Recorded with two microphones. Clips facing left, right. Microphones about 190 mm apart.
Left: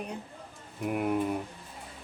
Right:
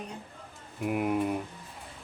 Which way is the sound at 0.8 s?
5° right (ahead or behind).